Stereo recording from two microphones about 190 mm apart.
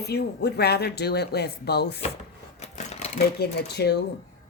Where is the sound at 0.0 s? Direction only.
60° left (ahead or behind).